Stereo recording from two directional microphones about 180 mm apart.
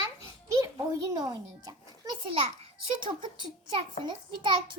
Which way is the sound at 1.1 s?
20° right (ahead or behind).